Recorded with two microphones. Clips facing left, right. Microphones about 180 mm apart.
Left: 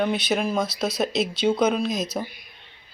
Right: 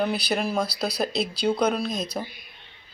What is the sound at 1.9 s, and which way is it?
Speech, 30° right (ahead or behind).